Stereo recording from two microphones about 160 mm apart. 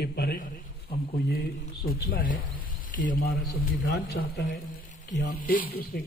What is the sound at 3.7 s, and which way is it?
Speech, 70° left (ahead or behind).